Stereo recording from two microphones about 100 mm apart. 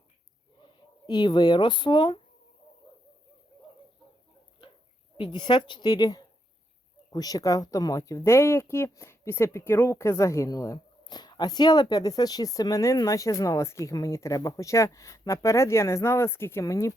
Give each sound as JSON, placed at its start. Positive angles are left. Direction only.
{"t": 0.6, "sound": "speech", "side_deg": 45}
{"t": 5.1, "sound": "a woman's voice", "side_deg": 50}
{"t": 11.0, "sound": "speech", "side_deg": 45}